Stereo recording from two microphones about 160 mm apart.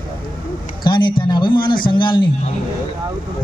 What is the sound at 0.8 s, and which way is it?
Speech, 30° left (ahead or behind).